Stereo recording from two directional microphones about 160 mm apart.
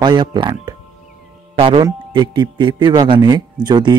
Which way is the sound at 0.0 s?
30° right (ahead or behind).